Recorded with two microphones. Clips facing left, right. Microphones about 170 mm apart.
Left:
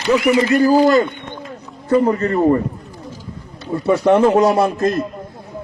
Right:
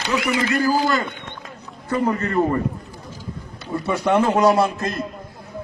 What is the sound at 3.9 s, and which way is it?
Speech, 35° left (ahead or behind).